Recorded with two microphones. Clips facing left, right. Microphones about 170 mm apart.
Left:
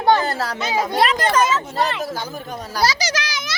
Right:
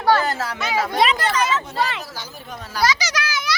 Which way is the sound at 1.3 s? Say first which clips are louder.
Left 3 dB; 45° left (ahead or behind).